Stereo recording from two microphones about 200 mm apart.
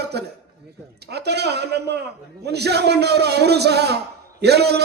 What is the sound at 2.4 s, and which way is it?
A man's voice, 55° right (ahead or behind).